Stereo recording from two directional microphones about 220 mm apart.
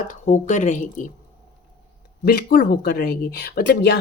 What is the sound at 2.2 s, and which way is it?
Speech, 45° left (ahead or behind).